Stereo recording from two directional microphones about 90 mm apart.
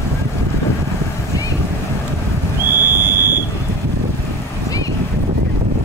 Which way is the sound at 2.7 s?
25° right (ahead or behind).